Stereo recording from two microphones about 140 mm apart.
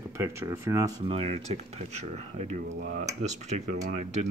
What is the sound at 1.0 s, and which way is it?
Speech, 45° right (ahead or behind).